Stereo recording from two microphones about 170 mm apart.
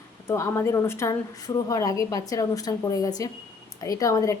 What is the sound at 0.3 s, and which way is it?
A woman's voice, 15° left (ahead or behind).